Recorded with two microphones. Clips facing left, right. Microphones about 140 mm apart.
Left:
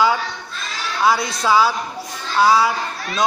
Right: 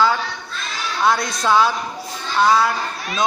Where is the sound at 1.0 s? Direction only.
5° left (ahead or behind).